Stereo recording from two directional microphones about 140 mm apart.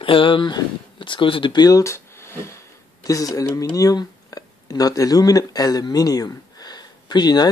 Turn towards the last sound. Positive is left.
turn(degrees=30)  # may be behind; listen again after turning